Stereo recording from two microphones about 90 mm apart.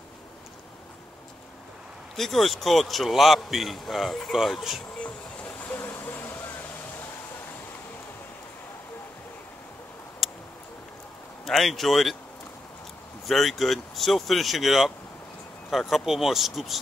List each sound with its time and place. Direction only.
2.1 s a man's voice: 5° left (ahead or behind)
5.0 s vehicle: 15° left (ahead or behind)
10.2 s a sound: centre (ahead or behind)
11.4 s a man's voice: centre (ahead or behind)
13.3 s a man's voice: centre (ahead or behind)